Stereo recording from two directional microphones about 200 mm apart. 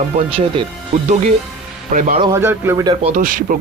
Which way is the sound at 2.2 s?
15° right (ahead or behind).